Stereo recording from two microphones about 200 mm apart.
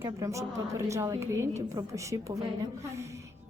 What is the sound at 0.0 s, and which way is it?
A woman's voice, 15° right (ahead or behind).